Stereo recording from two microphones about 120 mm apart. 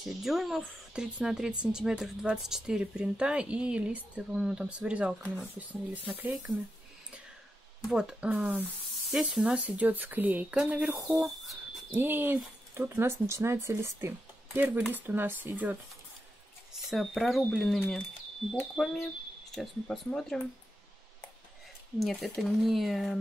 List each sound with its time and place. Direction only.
0.0 s speech: centre (ahead or behind)
7.9 s speech: 5° right (ahead or behind)
11.9 s speech: 15° right (ahead or behind)
16.8 s speech: centre (ahead or behind)
22.0 s speech: centre (ahead or behind)